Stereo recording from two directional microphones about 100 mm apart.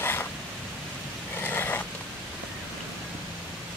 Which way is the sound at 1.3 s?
20° left (ahead or behind).